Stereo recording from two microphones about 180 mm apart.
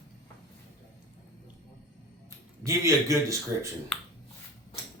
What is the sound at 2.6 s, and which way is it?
Speech, 20° right (ahead or behind).